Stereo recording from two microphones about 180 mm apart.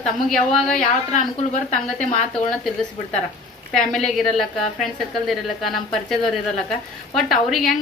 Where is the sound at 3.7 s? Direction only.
Centre (ahead or behind).